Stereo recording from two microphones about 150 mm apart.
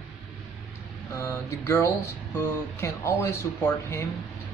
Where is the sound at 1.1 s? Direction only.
20° left (ahead or behind).